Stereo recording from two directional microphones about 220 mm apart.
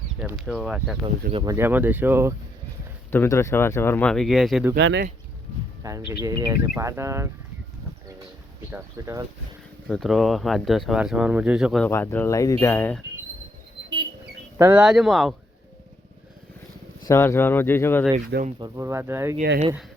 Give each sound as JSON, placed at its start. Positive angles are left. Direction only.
{"t": 0.2, "sound": "speech", "side_deg": -5}
{"t": 1.3, "sound": "speech", "side_deg": -20}
{"t": 1.5, "sound": "speech", "side_deg": -10}
{"t": 3.1, "sound": "speech", "side_deg": 10}
{"t": 4.8, "sound": "speech", "side_deg": -55}
{"t": 5.8, "sound": "speech", "side_deg": -15}
{"t": 8.7, "sound": "speech", "side_deg": -15}
{"t": 9.9, "sound": "speech", "side_deg": 0}
{"t": 11.9, "sound": "speech", "side_deg": 10}
{"t": 14.6, "sound": "speech", "side_deg": -5}
{"t": 17.1, "sound": "speech", "side_deg": 10}
{"t": 18.6, "sound": "speech", "side_deg": -10}